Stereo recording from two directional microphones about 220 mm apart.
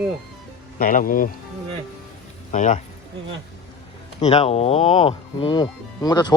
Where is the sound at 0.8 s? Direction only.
40° left (ahead or behind).